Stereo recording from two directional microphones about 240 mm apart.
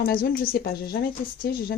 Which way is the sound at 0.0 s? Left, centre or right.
Left.